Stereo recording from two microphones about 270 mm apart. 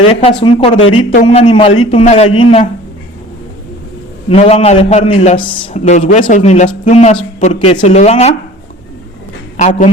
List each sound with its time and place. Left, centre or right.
0.1 s a man's voice: centre
4.3 s a man's voice: left
9.6 s a man's voice: left